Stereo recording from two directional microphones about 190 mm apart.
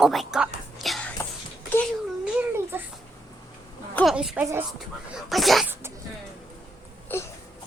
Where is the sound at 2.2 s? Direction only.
10° right (ahead or behind).